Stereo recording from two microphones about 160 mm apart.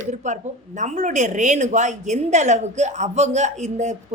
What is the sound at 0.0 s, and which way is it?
Speech, 50° right (ahead or behind).